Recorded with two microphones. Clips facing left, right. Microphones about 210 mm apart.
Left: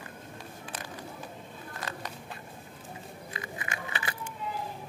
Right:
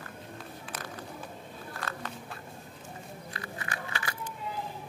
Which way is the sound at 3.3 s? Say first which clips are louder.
Left 1 dB; 15° left (ahead or behind).